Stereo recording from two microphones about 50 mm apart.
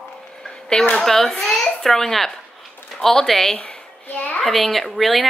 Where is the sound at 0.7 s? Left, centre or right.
Centre.